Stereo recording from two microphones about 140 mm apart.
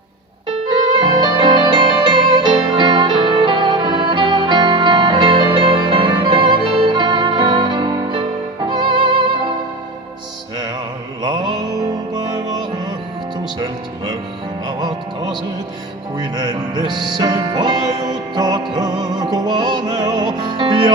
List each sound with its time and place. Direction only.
1.0 s music: 35° right (ahead or behind)
11.2 s music: 30° right (ahead or behind)
16.1 s music: 30° right (ahead or behind)